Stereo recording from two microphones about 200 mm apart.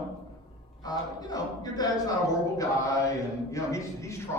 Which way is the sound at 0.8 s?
20° left (ahead or behind).